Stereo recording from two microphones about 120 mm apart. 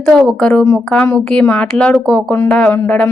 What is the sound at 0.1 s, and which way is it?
Speech, 5° left (ahead or behind).